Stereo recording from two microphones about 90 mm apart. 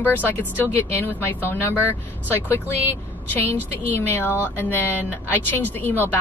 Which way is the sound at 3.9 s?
25° left (ahead or behind).